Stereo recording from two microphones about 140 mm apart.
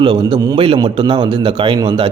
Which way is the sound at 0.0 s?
35° right (ahead or behind).